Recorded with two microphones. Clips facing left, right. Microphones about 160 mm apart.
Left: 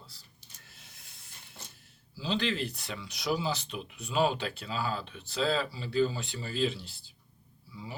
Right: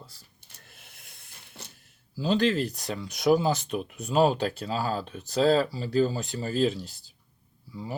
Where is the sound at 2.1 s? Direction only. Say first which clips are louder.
Right 7 dB; 45° right (ahead or behind).